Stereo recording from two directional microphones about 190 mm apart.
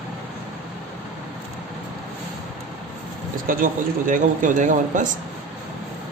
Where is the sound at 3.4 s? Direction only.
45° right (ahead or behind).